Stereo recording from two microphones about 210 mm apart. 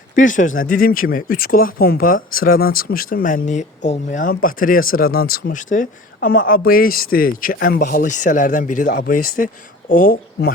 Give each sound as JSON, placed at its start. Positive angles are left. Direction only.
{"t": 0.2, "sound": "speech", "side_deg": 40}